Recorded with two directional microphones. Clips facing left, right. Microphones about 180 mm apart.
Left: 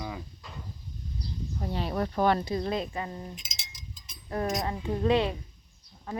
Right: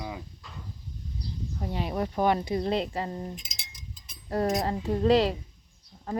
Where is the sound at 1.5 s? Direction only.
15° right (ahead or behind).